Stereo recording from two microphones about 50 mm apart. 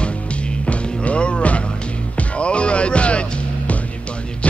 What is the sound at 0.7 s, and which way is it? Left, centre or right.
Music, left.